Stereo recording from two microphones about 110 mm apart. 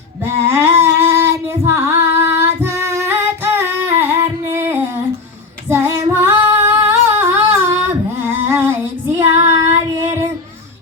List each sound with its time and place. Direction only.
0.3 s female singing: 25° right (ahead or behind)
9.1 s child singing: 25° right (ahead or behind)